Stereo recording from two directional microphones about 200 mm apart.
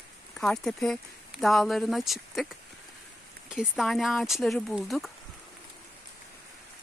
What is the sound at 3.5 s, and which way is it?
Speech, centre (ahead or behind).